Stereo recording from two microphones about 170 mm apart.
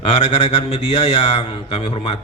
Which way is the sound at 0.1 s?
40° left (ahead or behind).